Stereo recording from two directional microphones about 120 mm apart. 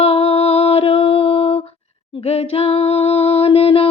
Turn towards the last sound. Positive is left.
turn(degrees=50)  # may be behind; listen again after turning